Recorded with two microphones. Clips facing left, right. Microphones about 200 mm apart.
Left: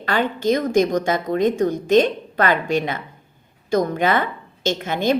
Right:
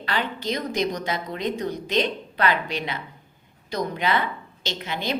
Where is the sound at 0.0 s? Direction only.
50° left (ahead or behind).